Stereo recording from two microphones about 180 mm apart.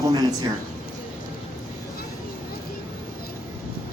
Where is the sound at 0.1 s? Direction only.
20° right (ahead or behind).